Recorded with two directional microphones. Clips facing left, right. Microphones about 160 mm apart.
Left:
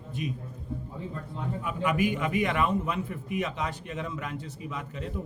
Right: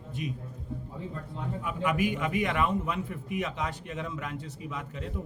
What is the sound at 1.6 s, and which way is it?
A man's voice, 30° left (ahead or behind).